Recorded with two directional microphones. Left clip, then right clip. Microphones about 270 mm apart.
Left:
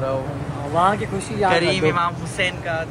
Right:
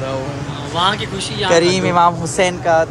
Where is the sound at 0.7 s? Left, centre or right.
Left.